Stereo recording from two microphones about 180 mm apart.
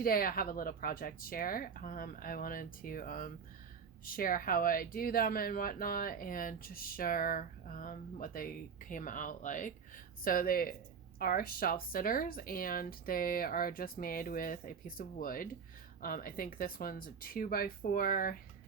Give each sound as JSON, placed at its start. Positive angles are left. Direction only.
{"t": 0.0, "sound": "speech", "side_deg": 55}